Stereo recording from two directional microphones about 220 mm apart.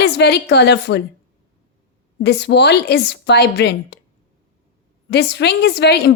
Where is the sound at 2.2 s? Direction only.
50° left (ahead or behind).